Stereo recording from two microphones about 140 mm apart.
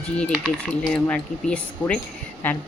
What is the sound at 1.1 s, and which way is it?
A woman's voice, 10° left (ahead or behind).